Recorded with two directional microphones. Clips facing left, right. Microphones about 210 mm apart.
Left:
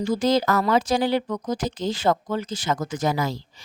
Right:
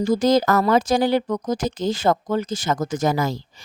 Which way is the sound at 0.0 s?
40° right (ahead or behind).